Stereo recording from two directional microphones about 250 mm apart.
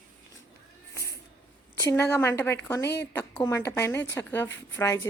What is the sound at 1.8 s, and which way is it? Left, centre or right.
A woman's voice, centre.